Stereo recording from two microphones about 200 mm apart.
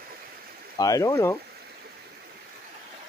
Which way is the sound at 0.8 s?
20° left (ahead or behind).